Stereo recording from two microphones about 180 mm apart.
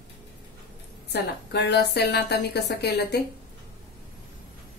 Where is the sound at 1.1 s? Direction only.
70° left (ahead or behind).